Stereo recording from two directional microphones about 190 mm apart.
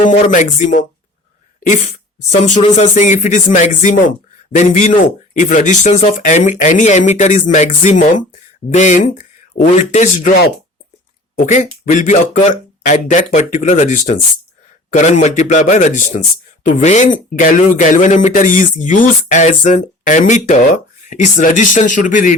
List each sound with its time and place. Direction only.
0.2 s speech: 40° left (ahead or behind)
11.4 s speech: 40° left (ahead or behind)